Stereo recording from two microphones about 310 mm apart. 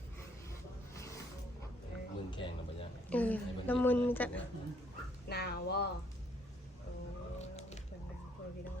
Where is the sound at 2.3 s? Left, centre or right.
Centre.